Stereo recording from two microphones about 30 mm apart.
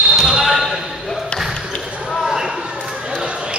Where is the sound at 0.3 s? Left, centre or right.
Centre.